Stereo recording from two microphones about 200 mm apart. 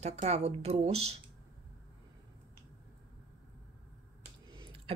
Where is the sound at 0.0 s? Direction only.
35° right (ahead or behind).